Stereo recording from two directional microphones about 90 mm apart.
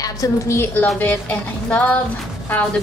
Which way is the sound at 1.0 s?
15° left (ahead or behind).